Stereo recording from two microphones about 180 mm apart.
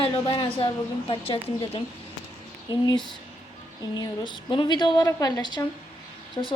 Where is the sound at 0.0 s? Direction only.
30° left (ahead or behind).